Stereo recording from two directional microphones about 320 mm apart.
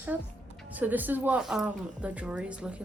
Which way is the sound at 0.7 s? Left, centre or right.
Centre.